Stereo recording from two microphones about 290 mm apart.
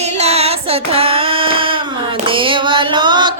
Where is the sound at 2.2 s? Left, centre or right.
Centre.